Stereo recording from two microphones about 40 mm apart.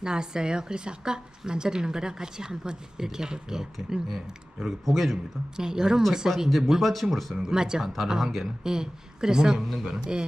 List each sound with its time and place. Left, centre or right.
0.0 s a woman's voice: centre
4.9 s speech: centre
5.5 s a woman's voice: centre
7.3 s a woman's voice: centre
8.6 s a woman's voice: centre
9.6 s speech: centre
9.8 s speech: centre